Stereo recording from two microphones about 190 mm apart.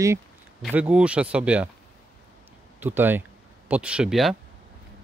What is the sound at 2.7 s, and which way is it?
Speech, 10° right (ahead or behind).